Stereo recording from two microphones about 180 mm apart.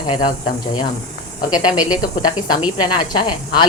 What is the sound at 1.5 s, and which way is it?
A woman's voice, 25° left (ahead or behind).